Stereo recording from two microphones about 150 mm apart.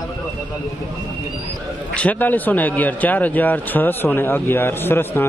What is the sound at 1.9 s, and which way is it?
A man's voice, 10° left (ahead or behind).